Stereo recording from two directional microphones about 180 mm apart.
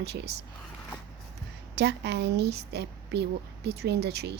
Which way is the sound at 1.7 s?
70° right (ahead or behind).